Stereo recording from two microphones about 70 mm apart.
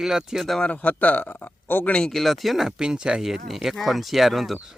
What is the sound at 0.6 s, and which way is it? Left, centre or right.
Speech, left.